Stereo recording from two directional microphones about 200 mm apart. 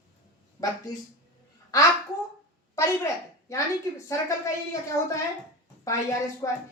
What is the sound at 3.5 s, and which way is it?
A woman's voice, 15° left (ahead or behind).